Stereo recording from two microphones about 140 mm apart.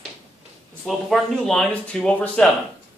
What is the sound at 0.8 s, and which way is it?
Speech, centre (ahead or behind).